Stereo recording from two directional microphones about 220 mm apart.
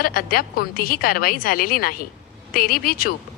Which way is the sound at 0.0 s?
40° left (ahead or behind).